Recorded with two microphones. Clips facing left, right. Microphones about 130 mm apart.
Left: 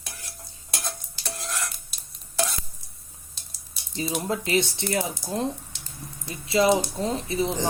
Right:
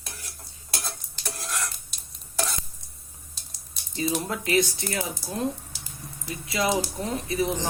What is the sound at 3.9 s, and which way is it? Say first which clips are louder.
Speech: even; 25° left (ahead or behind).